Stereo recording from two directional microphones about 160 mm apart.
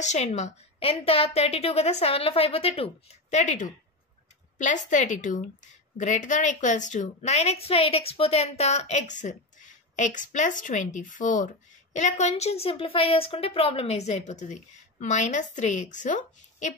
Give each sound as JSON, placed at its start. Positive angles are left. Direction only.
{"t": 0.0, "sound": "a woman's voice", "side_deg": 45}